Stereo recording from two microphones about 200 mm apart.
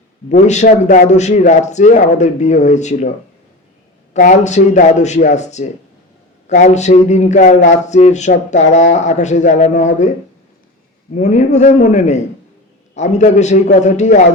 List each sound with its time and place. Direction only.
0.3 s speech: 35° left (ahead or behind)
4.1 s speech: 40° left (ahead or behind)
11.1 s speech: 35° left (ahead or behind)